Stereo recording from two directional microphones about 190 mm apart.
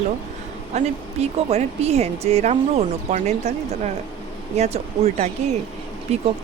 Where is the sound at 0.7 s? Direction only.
35° right (ahead or behind).